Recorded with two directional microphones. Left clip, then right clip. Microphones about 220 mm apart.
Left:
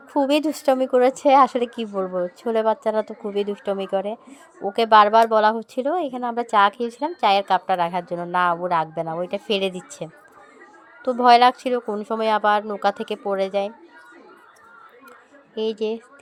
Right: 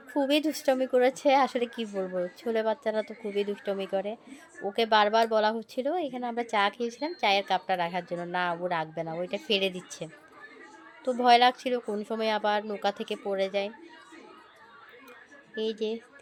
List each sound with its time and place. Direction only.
0.1 s speech: 15° left (ahead or behind)
15.5 s speech: 15° left (ahead or behind)